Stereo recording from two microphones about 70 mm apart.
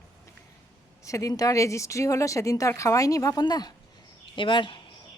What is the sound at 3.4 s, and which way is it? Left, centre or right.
Speech, left.